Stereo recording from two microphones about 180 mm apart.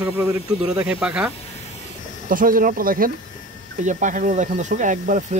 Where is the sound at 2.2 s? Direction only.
50° right (ahead or behind).